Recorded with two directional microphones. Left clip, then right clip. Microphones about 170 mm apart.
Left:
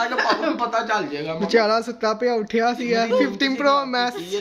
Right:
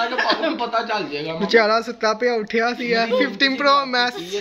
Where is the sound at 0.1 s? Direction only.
5° left (ahead or behind).